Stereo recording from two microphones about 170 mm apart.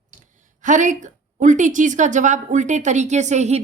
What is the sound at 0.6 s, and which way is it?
A woman's voice, 45° right (ahead or behind).